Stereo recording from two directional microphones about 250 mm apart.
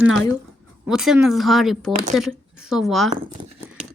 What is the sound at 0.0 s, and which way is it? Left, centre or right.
Speech, centre.